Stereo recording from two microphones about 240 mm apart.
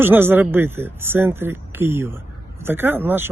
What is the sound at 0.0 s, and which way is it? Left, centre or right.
Speech, centre.